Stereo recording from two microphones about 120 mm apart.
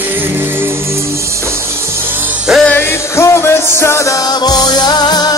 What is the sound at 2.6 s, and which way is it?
Music, 15° left (ahead or behind).